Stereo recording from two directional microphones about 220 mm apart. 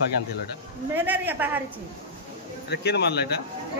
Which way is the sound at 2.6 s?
50° left (ahead or behind).